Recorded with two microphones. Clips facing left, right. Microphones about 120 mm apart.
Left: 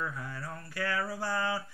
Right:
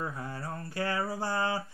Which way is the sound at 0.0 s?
30° right (ahead or behind).